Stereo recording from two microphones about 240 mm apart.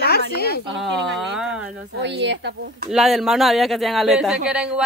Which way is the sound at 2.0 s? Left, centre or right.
Right.